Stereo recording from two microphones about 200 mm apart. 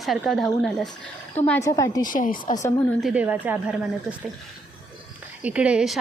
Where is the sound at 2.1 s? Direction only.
40° left (ahead or behind).